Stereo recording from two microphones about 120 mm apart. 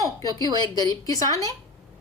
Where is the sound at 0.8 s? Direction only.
30° left (ahead or behind).